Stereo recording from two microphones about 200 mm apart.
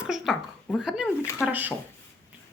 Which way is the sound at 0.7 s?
5° right (ahead or behind).